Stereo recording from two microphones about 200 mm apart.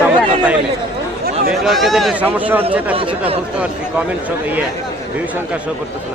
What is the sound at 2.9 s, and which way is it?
Speech, 25° right (ahead or behind).